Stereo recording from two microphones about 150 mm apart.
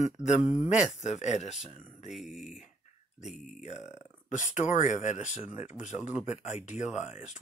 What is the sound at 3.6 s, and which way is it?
Speech, 50° left (ahead or behind).